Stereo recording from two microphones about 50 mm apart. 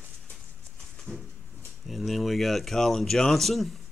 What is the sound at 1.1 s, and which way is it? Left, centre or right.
Bird, centre.